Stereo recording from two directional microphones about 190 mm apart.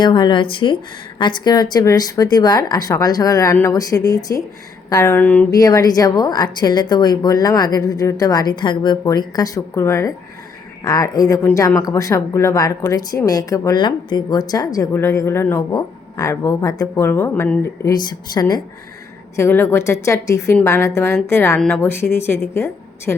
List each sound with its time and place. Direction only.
0.0 s a woman's voice: 25° left (ahead or behind)